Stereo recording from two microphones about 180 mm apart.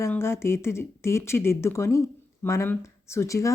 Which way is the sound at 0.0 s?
15° left (ahead or behind).